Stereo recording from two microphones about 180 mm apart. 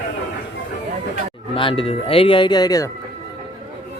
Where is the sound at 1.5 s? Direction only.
30° left (ahead or behind).